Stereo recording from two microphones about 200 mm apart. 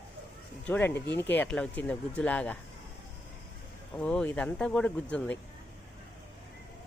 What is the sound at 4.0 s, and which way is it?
Speech, 5° left (ahead or behind).